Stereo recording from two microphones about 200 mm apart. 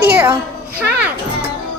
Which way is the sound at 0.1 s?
10° right (ahead or behind).